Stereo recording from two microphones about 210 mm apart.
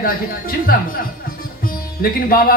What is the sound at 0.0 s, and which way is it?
A man's voice, 45° left (ahead or behind).